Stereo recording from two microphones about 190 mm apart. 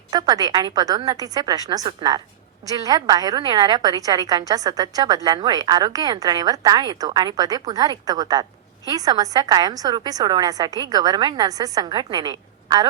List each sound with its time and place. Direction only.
0.1 s a woman's voice: 20° right (ahead or behind)